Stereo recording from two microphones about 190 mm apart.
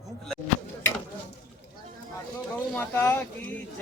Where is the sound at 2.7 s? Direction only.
10° left (ahead or behind).